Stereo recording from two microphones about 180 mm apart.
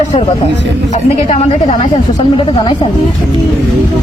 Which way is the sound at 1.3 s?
45° left (ahead or behind).